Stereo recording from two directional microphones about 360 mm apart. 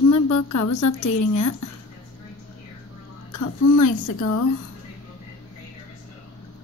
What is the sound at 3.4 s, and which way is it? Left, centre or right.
A woman's voice, left.